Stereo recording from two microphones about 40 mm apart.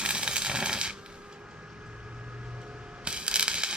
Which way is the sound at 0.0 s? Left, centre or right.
Right.